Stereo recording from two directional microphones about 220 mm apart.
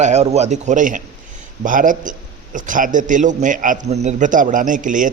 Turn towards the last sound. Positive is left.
turn(degrees=-35)  # may be behind; listen again after turning